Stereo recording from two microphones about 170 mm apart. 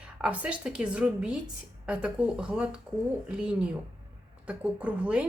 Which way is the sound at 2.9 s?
25° right (ahead or behind).